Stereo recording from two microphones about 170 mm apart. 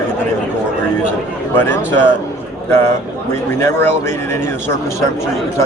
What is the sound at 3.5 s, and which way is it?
Speech, 15° left (ahead or behind).